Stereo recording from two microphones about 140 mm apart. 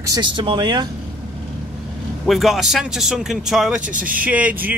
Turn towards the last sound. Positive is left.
turn(degrees=-10)  # may be behind; listen again after turning